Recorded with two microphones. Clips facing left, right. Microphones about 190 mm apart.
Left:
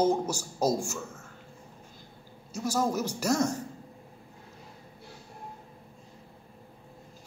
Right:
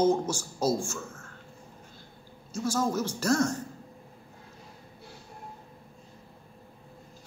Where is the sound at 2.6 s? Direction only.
15° left (ahead or behind).